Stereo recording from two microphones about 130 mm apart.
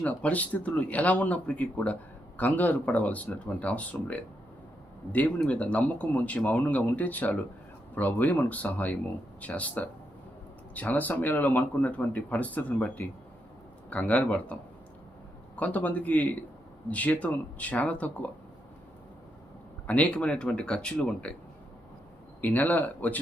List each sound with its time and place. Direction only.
0.0 s speech: 10° left (ahead or behind)
5.4 s speech: 10° left (ahead or behind)
19.9 s speech: 10° left (ahead or behind)
22.4 s speech: 10° left (ahead or behind)